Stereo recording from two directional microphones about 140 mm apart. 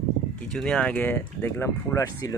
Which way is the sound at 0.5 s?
5° left (ahead or behind).